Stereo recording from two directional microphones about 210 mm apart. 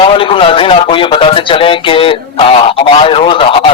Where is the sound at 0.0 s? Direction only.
25° left (ahead or behind).